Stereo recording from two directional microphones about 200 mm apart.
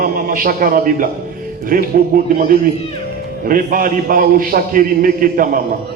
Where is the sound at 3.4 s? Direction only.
45° right (ahead or behind).